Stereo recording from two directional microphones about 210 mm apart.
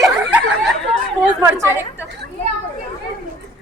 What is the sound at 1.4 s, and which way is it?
Chatter, 15° right (ahead or behind).